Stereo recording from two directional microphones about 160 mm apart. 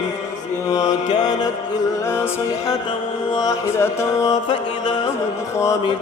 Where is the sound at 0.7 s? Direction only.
25° left (ahead or behind).